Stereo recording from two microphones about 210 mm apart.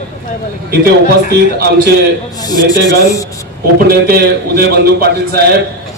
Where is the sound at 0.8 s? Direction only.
50° right (ahead or behind).